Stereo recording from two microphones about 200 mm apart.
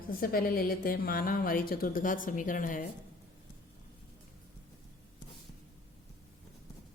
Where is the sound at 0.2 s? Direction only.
45° left (ahead or behind).